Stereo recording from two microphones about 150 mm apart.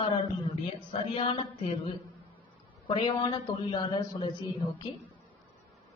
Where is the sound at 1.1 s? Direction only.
35° left (ahead or behind).